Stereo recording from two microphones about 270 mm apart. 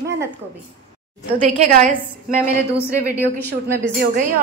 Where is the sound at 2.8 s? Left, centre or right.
Centre.